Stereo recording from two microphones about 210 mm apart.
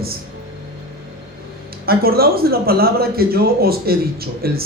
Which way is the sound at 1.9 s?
45° right (ahead or behind).